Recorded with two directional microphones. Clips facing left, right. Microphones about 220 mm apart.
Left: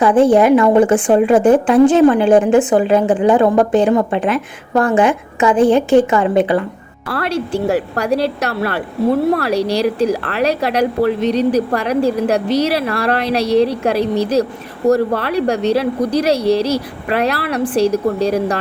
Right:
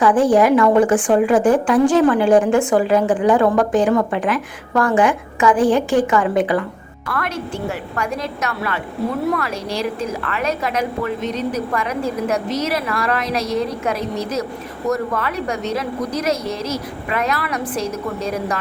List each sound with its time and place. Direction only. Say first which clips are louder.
0.0 s a woman's voice: left 3 dB; 25° left (ahead or behind)